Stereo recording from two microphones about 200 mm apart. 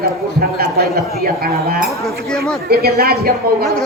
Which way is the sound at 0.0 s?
50° right (ahead or behind).